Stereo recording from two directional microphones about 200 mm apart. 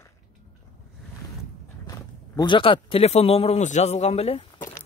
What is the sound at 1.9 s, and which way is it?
Speech, 20° left (ahead or behind).